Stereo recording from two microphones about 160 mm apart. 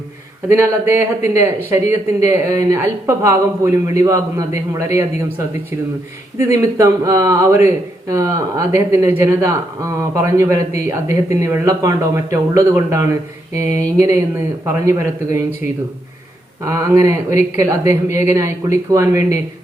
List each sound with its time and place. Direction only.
0.4 s speech: 15° right (ahead or behind)
6.4 s speech: 20° right (ahead or behind)